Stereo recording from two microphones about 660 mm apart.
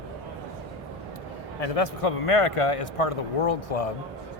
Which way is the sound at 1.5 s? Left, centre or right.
Left.